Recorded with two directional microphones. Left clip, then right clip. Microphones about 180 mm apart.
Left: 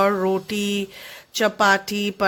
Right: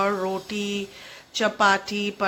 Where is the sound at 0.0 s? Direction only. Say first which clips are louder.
Left 5 dB; 45° left (ahead or behind).